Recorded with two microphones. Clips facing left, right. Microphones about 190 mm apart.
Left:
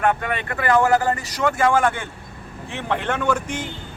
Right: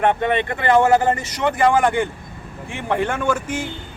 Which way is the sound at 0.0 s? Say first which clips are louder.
Right 4 dB; 25° right (ahead or behind).